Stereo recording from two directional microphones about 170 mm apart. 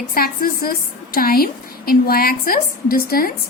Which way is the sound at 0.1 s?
60° left (ahead or behind).